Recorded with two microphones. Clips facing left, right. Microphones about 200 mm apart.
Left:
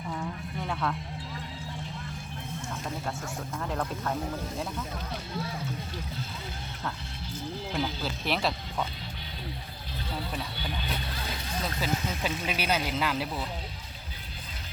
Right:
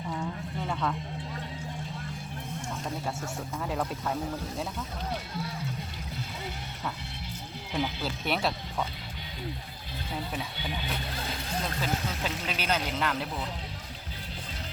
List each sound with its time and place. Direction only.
0.7 s music: centre (ahead or behind)
3.6 s speech: 5° right (ahead or behind)
8.0 s speech: centre (ahead or behind)
10.3 s speech: 15° right (ahead or behind)
11.6 s speech: 10° left (ahead or behind)